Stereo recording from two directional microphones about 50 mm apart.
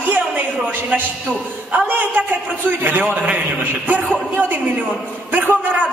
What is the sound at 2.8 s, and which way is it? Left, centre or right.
Speech, right.